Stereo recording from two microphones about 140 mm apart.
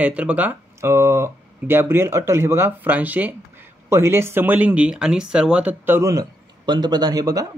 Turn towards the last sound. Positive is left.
turn(degrees=-25)  # may be behind; listen again after turning